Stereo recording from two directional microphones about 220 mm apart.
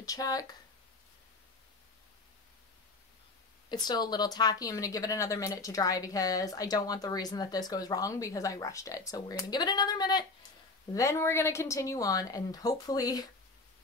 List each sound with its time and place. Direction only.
0.0 s speech: 15° left (ahead or behind)
3.6 s speech: 20° left (ahead or behind)